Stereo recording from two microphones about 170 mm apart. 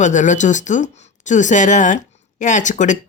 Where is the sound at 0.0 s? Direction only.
45° left (ahead or behind).